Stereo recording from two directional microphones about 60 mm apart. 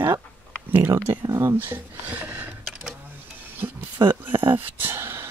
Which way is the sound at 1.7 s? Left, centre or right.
Right.